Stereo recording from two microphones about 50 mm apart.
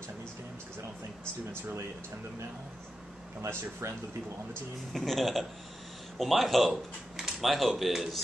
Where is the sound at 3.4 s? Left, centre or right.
Right.